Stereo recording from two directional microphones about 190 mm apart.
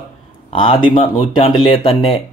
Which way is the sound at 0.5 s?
30° left (ahead or behind).